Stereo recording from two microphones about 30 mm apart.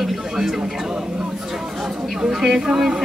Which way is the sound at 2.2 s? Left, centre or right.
Centre.